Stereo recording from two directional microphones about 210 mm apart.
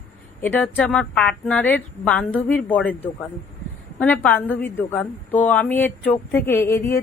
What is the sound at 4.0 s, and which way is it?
A woman's voice, 5° left (ahead or behind).